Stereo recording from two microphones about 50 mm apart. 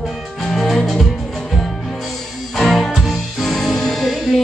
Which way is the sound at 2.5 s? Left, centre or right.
Centre.